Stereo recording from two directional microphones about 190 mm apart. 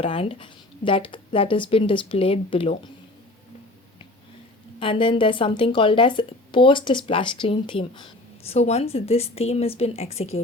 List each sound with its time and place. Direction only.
0.0 s speech: 30° left (ahead or behind)
4.8 s speech: 25° left (ahead or behind)